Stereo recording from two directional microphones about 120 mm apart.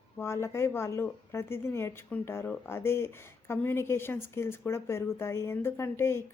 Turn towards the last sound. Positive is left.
turn(degrees=20)  # may be behind; listen again after turning